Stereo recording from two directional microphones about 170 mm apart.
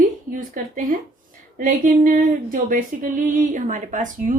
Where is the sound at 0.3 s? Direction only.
55° right (ahead or behind).